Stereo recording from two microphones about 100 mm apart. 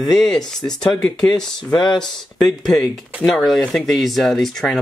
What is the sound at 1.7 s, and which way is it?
Speech, 45° left (ahead or behind).